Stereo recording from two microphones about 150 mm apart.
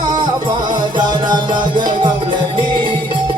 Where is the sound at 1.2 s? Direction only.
30° right (ahead or behind).